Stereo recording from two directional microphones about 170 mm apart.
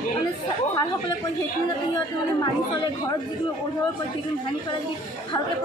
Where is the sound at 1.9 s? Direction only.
25° left (ahead or behind).